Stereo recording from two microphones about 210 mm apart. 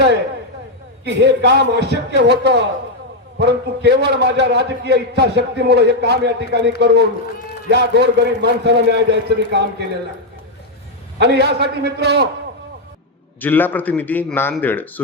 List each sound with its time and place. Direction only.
1.0 s a man's voice: 55° right (ahead or behind)
11.2 s a man's voice: 50° right (ahead or behind)
13.4 s a man's voice: 10° left (ahead or behind)